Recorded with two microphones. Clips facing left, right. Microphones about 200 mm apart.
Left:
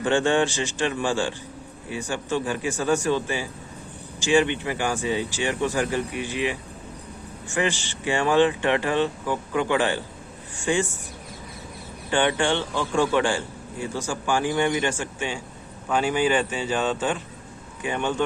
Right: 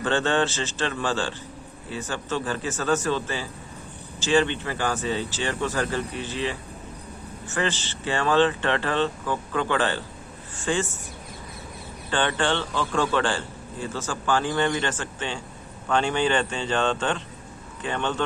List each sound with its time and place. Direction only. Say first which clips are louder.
0.0 s a man's voice: left 2 dB; 15° left (ahead or behind)
12.1 s a man's voice: left 2 dB; 15° left (ahead or behind)